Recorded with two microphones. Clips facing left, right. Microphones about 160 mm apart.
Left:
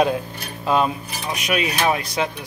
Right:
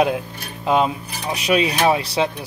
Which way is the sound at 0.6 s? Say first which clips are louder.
Right 1 dB; 15° right (ahead or behind).